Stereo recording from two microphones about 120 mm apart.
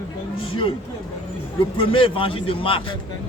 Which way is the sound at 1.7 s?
45° left (ahead or behind).